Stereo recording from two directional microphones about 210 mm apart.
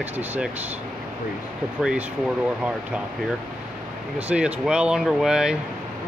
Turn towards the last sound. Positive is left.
turn(degrees=-5)  # may be behind; listen again after turning